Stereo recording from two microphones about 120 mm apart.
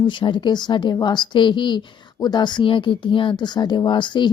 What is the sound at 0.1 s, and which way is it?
Speech, 40° left (ahead or behind).